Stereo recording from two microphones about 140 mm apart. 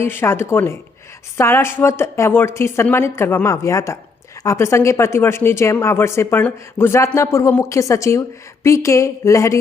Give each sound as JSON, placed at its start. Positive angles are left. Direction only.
{"t": 0.0, "sound": "speech", "side_deg": 15}